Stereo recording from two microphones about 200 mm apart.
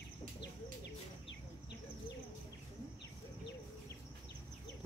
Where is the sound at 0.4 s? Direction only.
60° left (ahead or behind).